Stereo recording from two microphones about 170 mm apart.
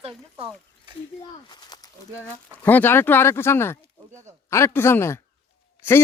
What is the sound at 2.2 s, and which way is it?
Speech, 10° left (ahead or behind).